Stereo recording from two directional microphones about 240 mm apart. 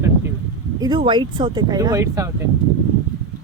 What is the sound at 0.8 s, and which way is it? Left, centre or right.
Speech, centre.